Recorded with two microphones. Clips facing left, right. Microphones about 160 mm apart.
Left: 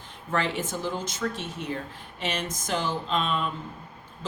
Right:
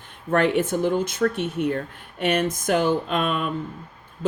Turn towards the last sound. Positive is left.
turn(degrees=-55)  # may be behind; listen again after turning